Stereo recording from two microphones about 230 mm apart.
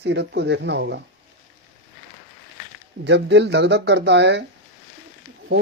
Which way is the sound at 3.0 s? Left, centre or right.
Right.